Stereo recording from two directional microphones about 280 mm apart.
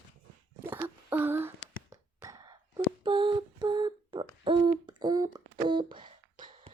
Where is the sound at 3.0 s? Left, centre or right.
Centre.